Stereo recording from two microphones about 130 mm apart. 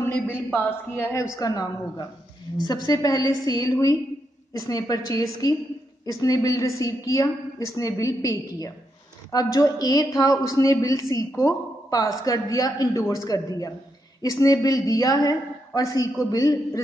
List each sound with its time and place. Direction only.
0.5 s a woman's voice: 15° left (ahead or behind)